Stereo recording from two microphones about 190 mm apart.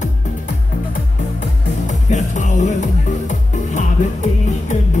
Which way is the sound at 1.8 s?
40° left (ahead or behind).